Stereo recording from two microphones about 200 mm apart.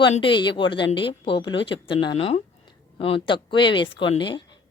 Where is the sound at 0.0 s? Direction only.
25° left (ahead or behind).